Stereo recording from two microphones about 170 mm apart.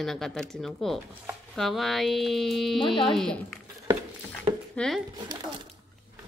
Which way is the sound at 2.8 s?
30° left (ahead or behind).